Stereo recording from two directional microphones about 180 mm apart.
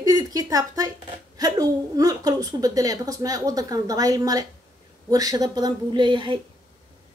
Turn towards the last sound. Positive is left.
turn(degrees=-25)  # may be behind; listen again after turning